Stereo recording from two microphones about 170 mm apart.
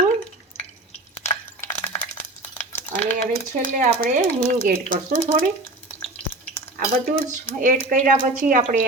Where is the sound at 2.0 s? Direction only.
45° left (ahead or behind).